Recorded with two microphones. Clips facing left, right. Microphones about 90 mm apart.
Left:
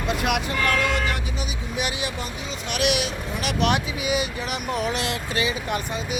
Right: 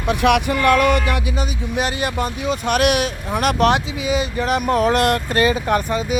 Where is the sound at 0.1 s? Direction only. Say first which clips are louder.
Right 9 dB; 65° right (ahead or behind).